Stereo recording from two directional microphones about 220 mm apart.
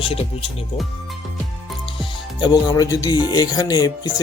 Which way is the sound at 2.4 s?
20° left (ahead or behind).